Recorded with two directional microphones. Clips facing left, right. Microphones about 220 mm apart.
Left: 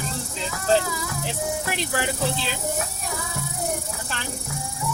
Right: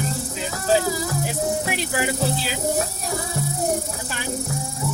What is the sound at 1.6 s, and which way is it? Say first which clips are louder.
Speech: right 2 dB; 5° right (ahead or behind).